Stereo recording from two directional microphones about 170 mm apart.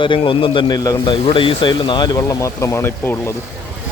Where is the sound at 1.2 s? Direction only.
30° left (ahead or behind); by 3.3 s 10° left (ahead or behind).